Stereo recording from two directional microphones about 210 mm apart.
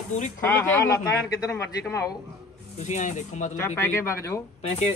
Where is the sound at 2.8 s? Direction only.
35° left (ahead or behind).